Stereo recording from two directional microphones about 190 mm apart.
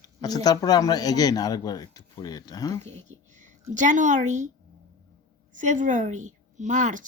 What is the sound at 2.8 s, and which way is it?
A woman's voice, 35° right (ahead or behind).